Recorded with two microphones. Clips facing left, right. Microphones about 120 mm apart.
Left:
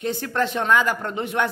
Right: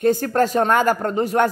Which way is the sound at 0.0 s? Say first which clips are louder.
Right 7 dB; 45° right (ahead or behind).